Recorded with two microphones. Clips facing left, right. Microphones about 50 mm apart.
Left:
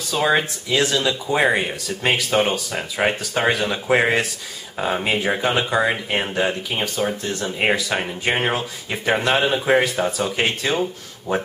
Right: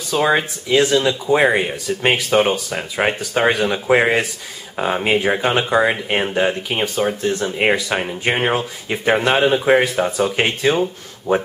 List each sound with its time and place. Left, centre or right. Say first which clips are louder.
0.1 s speech: right 2 dB; centre
7.1 s speech: right 5 dB; centre